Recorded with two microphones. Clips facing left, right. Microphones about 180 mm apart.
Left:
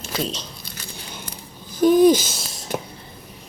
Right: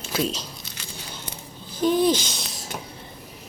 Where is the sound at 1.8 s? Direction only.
10° left (ahead or behind).